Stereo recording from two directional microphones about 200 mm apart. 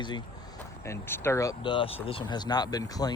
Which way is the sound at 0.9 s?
10° left (ahead or behind).